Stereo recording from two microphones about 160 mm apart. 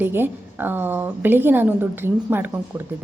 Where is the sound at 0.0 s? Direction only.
15° right (ahead or behind).